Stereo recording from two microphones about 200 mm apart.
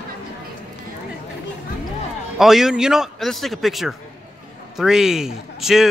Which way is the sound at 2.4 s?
Centre (ahead or behind).